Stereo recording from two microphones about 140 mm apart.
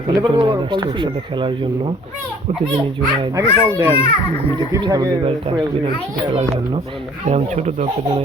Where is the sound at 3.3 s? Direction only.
20° right (ahead or behind).